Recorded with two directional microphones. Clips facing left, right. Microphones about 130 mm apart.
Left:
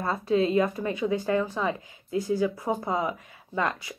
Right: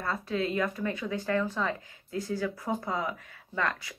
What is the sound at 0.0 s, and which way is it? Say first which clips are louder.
Speech: left 7 dB; 25° left (ahead or behind).